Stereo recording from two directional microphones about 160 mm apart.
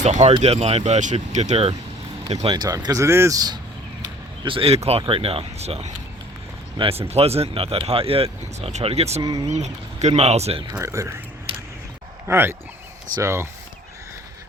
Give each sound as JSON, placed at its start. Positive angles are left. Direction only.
{"t": 0.0, "sound": "speech", "side_deg": -45}
{"t": 4.4, "sound": "speech", "side_deg": -35}
{"t": 9.2, "sound": "speech", "side_deg": -20}
{"t": 9.5, "sound": "speech", "side_deg": -45}
{"t": 10.7, "sound": "speech", "side_deg": -20}
{"t": 12.3, "sound": "speech", "side_deg": -15}